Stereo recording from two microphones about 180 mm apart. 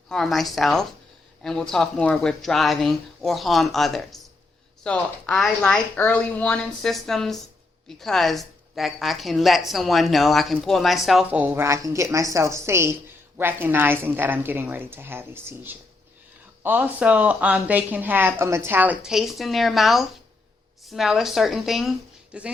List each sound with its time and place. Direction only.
0.1 s a woman's voice: centre (ahead or behind)